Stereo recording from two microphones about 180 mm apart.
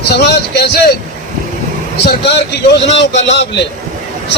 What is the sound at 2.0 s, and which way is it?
A man's voice, 70° left (ahead or behind).